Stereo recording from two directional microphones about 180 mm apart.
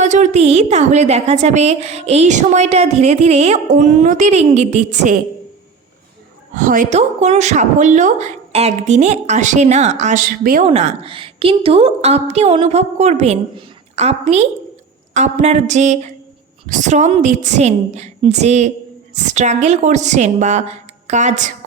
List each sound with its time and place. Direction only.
0.0 s a woman's voice: 40° right (ahead or behind)
6.5 s a woman's voice: 45° right (ahead or behind)
10.6 s a woman's voice: 40° right (ahead or behind)